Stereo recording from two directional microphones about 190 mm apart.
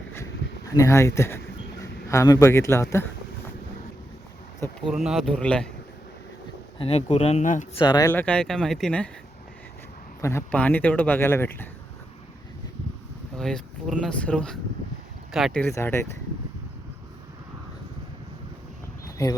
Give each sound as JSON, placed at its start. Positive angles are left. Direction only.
{"t": 0.8, "sound": "speech", "side_deg": 15}
{"t": 4.9, "sound": "speech", "side_deg": 0}
{"t": 6.7, "sound": "speech", "side_deg": 30}
{"t": 7.8, "sound": "speech", "side_deg": 20}
{"t": 8.1, "sound": "speech", "side_deg": 5}
{"t": 10.2, "sound": "speech", "side_deg": 15}
{"t": 13.3, "sound": "speech", "side_deg": 5}
{"t": 15.6, "sound": "speech", "side_deg": 15}